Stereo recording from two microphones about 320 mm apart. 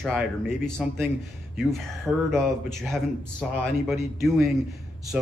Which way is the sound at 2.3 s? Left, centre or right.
Centre.